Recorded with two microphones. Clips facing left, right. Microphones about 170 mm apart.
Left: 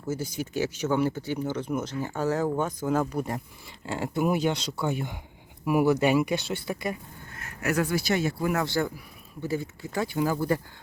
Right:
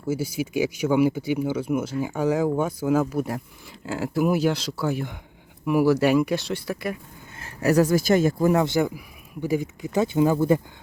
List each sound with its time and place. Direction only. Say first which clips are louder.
0.1 s speech: right 5 dB; 10° right (ahead or behind)
7.3 s speech: right 7 dB; 30° right (ahead or behind)
8.5 s speech: right 6 dB; 20° right (ahead or behind)